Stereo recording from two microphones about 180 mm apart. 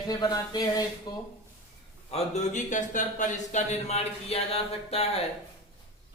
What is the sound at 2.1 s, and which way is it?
Speech, 40° left (ahead or behind).